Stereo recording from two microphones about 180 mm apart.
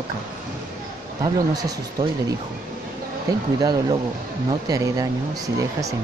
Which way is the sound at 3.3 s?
20° right (ahead or behind).